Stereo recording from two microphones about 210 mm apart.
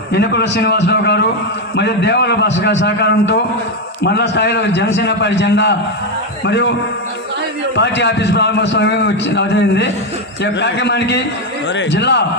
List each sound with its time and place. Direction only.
0.1 s a man's voice: 55° left (ahead or behind)
7.7 s a man's voice: 55° left (ahead or behind)